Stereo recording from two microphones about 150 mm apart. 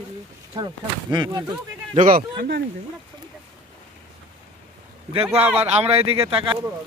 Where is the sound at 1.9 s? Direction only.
65° right (ahead or behind).